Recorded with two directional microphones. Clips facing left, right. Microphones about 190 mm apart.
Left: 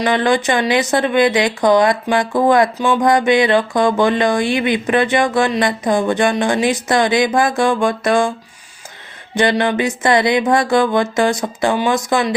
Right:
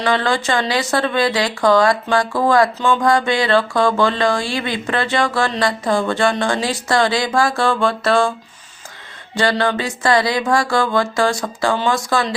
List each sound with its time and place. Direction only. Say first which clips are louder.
0.0 s speech: left 3 dB; 15° left (ahead or behind)
9.3 s speech: left 2 dB; 20° left (ahead or behind)